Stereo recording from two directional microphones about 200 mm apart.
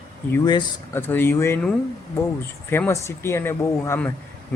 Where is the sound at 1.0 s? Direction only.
10° left (ahead or behind).